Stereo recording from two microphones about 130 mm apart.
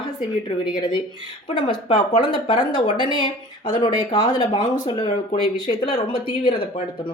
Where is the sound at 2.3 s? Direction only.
35° left (ahead or behind).